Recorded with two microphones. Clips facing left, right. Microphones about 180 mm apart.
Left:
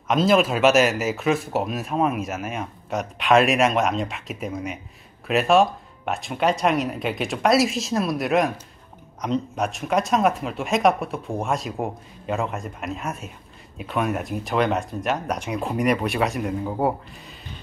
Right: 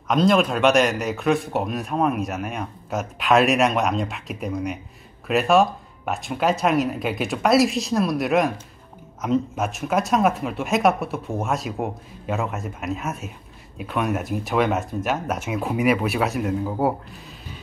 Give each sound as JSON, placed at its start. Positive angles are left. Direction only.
{"t": 0.1, "sound": "speech", "side_deg": 5}